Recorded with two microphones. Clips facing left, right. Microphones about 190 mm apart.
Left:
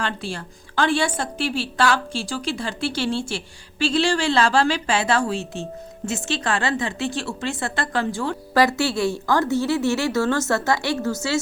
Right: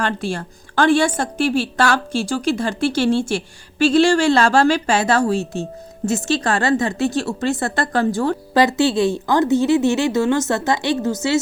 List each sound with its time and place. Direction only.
0.0 s a woman's voice: 45° right (ahead or behind)
8.5 s a woman's voice: 20° right (ahead or behind)